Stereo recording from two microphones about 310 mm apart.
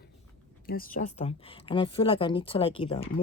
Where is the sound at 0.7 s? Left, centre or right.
Left.